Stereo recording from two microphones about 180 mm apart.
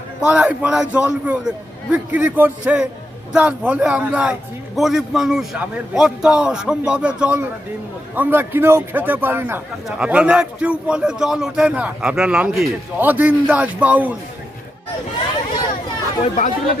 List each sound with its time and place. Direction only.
0.2 s a man's voice: 5° right (ahead or behind)
16.2 s speech: 45° left (ahead or behind)